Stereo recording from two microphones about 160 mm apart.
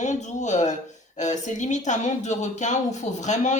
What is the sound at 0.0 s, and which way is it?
Speech, 50° left (ahead or behind).